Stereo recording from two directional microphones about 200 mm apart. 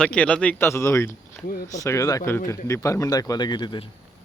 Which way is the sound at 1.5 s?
45° left (ahead or behind).